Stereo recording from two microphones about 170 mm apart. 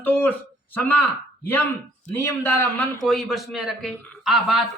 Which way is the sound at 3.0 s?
Centre (ahead or behind).